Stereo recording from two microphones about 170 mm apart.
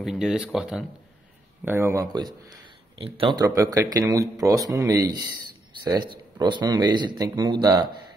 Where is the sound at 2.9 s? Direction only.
30° right (ahead or behind).